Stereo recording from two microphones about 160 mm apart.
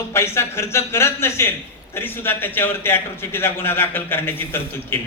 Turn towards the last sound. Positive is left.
turn(degrees=15)  # may be behind; listen again after turning